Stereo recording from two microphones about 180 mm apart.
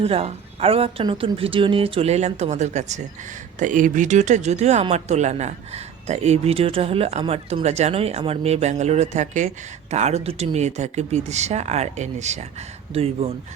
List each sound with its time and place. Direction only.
0.0 s speech: 35° right (ahead or behind)